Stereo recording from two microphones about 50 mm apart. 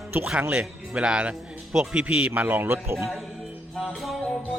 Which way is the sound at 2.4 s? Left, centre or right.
Right.